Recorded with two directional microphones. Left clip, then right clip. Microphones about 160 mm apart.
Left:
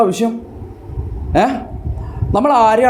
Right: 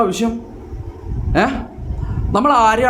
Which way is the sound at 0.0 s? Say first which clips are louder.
Left 3 dB; 10° left (ahead or behind).